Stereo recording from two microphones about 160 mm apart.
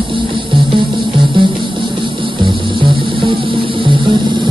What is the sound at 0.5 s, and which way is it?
Music, 30° right (ahead or behind).